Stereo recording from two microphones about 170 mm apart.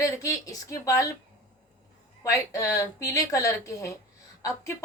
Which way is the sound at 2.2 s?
20° left (ahead or behind).